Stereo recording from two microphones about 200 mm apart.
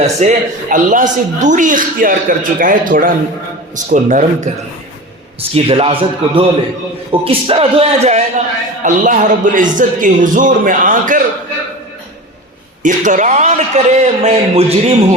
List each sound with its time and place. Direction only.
0.0 s a man's voice: 35° right (ahead or behind)
12.8 s speech: 40° right (ahead or behind)